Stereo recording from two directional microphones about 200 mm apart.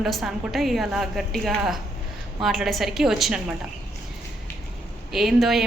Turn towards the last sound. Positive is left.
turn(degrees=0)  # may be behind; listen again after turning